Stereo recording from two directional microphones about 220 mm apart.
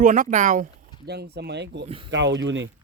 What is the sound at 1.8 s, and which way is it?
Speech, 25° right (ahead or behind).